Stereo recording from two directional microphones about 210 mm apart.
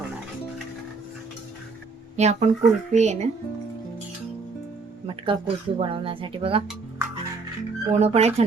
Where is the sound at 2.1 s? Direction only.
30° right (ahead or behind).